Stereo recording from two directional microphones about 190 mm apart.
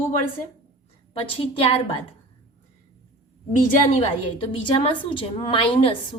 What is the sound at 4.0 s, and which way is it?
A woman's voice, 30° left (ahead or behind).